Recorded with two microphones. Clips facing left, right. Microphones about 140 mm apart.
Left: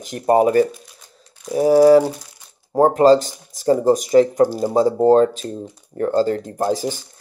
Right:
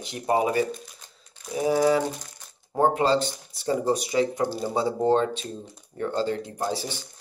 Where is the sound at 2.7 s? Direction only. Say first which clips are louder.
Left 9 dB; 40° left (ahead or behind).